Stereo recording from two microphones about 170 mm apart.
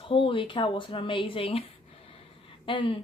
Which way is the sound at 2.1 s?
30° left (ahead or behind).